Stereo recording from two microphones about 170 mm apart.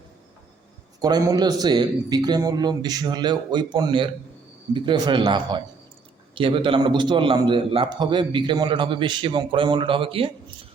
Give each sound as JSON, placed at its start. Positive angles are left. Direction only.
{"t": 1.0, "sound": "a man's voice", "side_deg": -20}